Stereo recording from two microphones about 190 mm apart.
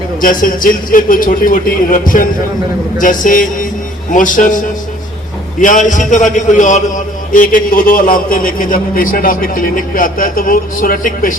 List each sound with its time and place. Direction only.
0.2 s a man's voice: 45° left (ahead or behind)